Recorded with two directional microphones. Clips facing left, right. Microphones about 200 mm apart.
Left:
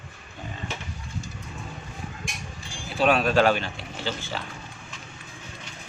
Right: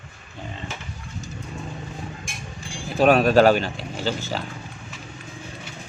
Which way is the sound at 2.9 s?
45° right (ahead or behind).